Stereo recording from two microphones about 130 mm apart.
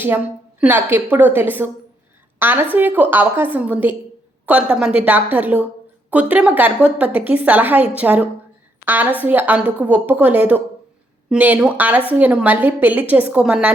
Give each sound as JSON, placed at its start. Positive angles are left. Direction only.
{"t": 0.6, "sound": "a woman's voice", "side_deg": -15}